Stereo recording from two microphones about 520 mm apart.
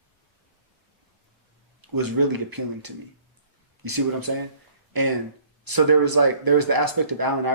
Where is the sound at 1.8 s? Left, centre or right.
Right.